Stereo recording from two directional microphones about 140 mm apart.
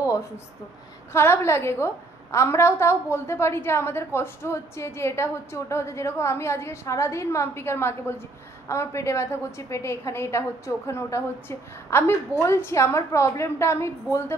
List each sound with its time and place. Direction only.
1.1 s a woman's voice: 20° left (ahead or behind)